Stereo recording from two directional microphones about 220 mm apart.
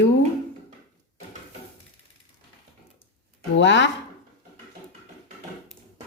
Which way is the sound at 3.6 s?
55° left (ahead or behind).